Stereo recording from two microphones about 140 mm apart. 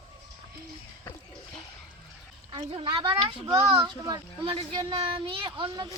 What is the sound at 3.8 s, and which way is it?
Speech, 30° right (ahead or behind).